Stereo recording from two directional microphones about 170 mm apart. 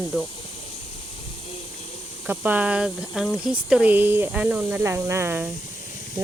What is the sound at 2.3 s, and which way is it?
Speech, 10° right (ahead or behind).